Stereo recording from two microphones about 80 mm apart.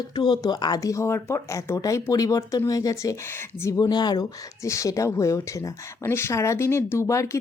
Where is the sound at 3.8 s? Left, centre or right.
Left.